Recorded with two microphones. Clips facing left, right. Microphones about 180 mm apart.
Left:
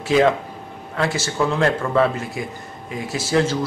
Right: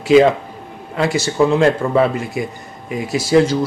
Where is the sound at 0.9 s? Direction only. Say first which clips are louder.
Right 5 dB; 15° right (ahead or behind).